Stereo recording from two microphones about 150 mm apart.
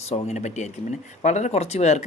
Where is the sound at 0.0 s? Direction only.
45° left (ahead or behind).